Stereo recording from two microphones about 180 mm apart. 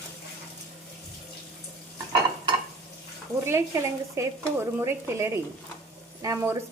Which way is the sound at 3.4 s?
15° right (ahead or behind).